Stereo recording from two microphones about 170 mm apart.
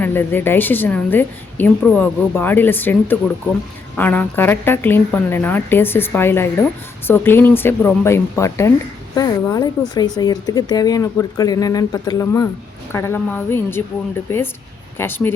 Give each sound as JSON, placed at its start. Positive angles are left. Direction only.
{"t": 0.0, "sound": "a woman's voice", "side_deg": 10}